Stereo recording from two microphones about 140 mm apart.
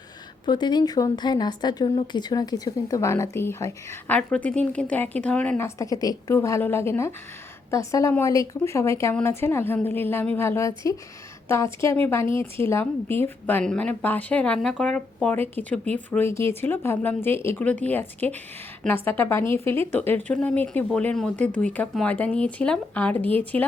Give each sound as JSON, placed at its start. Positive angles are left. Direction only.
{"t": 0.4, "sound": "a woman's voice", "side_deg": 30}
{"t": 5.6, "sound": "a woman's voice", "side_deg": 25}